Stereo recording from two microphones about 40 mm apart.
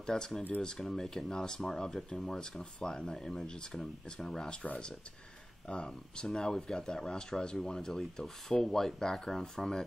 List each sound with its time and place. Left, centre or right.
0.0 s speech: centre
5.9 s speech: centre